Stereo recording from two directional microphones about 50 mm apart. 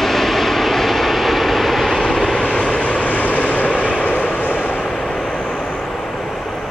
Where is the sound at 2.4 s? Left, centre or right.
Centre.